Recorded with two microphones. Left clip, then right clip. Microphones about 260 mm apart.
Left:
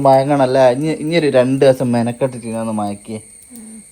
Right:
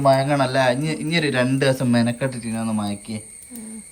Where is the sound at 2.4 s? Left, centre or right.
Right.